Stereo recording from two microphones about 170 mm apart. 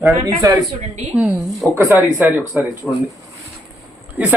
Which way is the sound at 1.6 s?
Centre (ahead or behind).